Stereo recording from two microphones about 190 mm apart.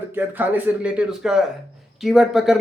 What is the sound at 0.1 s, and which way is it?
A man's voice, 10° right (ahead or behind).